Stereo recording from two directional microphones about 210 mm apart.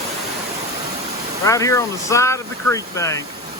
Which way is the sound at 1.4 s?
15° left (ahead or behind).